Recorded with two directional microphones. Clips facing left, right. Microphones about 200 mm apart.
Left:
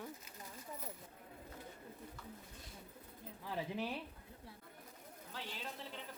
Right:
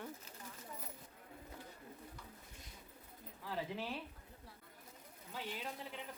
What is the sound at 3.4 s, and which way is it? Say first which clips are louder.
Speech: left 1 dB; 15° left (ahead or behind).